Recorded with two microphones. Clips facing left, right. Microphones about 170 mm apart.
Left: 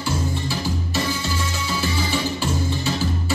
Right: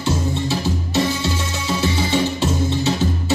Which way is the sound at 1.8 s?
25° right (ahead or behind).